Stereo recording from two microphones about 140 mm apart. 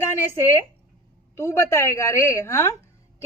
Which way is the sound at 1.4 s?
20° left (ahead or behind).